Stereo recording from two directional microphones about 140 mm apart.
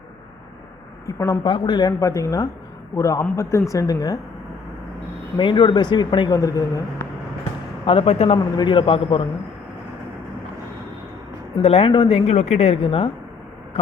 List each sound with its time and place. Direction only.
1.0 s speech: 20° left (ahead or behind)
1.5 s speech: 35° left (ahead or behind)
2.0 s speech: 20° left (ahead or behind)
5.4 s speech: 35° left (ahead or behind)
7.9 s a woman's voice: 45° left (ahead or behind)
8.5 s speech: 35° left (ahead or behind)
11.6 s a woman's voice: 45° left (ahead or behind)